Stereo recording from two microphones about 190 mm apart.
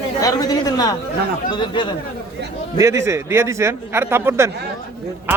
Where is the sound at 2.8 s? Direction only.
15° right (ahead or behind).